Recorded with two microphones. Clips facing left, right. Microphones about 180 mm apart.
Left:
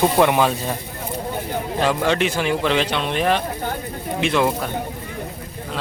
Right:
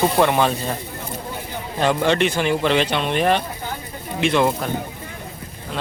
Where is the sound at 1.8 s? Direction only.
Centre (ahead or behind).